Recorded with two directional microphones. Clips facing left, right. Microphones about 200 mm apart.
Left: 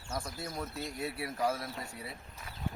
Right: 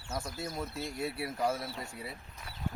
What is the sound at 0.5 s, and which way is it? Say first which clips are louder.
Speech: left 1 dB; centre (ahead or behind).